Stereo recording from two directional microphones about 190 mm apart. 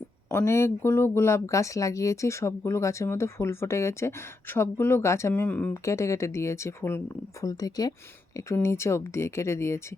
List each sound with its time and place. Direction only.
0.3 s speech: 15° left (ahead or behind)